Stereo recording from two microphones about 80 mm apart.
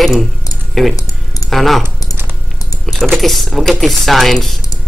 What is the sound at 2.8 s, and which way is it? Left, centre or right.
Speech, centre.